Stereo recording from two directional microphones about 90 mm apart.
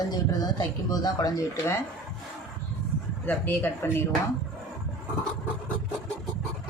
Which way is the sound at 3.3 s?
20° left (ahead or behind).